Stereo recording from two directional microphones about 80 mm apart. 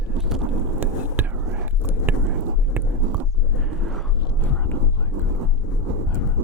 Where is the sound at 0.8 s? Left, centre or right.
Right.